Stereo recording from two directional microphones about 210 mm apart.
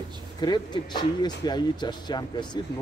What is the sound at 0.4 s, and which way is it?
Speech, 20° left (ahead or behind).